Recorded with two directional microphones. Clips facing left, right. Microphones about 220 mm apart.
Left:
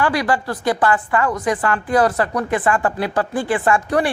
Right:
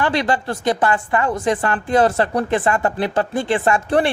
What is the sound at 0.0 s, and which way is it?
Speech, 25° right (ahead or behind).